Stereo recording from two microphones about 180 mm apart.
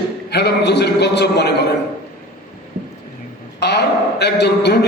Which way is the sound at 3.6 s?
65° left (ahead or behind).